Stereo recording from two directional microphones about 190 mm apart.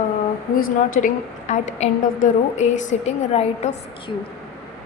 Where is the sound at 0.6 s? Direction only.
45° left (ahead or behind).